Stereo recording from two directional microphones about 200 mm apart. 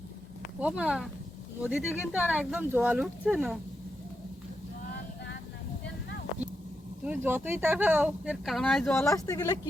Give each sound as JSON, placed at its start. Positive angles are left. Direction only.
{"t": 0.6, "sound": "speech", "side_deg": -5}
{"t": 7.0, "sound": "speech", "side_deg": -10}
{"t": 9.0, "sound": "speech", "side_deg": 15}